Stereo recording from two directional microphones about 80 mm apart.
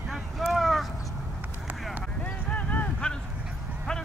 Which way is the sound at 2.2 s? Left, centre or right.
Centre.